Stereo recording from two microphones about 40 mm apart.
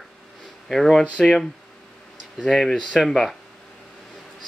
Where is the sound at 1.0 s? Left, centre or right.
Left.